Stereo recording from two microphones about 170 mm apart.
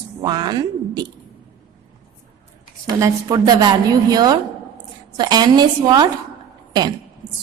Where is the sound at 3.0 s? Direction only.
20° right (ahead or behind).